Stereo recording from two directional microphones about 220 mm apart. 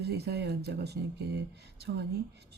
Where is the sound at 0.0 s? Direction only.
45° right (ahead or behind).